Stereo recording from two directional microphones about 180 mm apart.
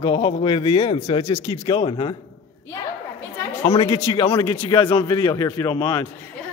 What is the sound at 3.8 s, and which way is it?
A man's voice, 35° left (ahead or behind).